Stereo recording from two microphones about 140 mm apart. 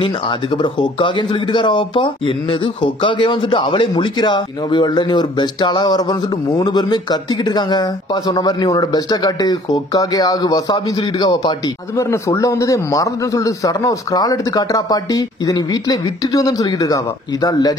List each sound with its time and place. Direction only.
0.0 s speech: 35° left (ahead or behind)